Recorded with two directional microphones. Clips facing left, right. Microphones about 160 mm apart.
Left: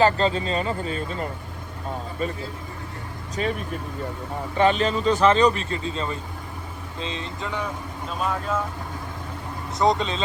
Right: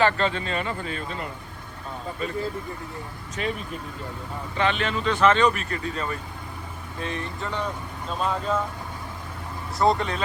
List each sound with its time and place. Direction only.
0.0 s speech: 35° left (ahead or behind)
3.4 s speech: 35° left (ahead or behind)
4.5 s speech: 40° left (ahead or behind); by 7.7 s 15° left (ahead or behind)
8.2 s speech: 5° left (ahead or behind)
9.7 s speech: 20° left (ahead or behind)